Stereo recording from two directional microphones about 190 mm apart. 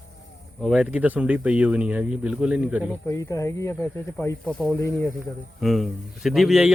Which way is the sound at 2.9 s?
15° left (ahead or behind).